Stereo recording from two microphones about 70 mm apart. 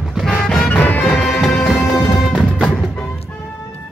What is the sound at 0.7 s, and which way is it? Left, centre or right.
Music, left.